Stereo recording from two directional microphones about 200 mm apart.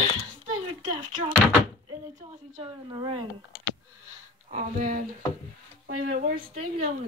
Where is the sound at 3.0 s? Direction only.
25° right (ahead or behind).